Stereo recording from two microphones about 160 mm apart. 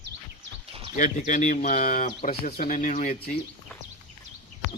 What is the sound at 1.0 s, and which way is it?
Speech, 50° left (ahead or behind).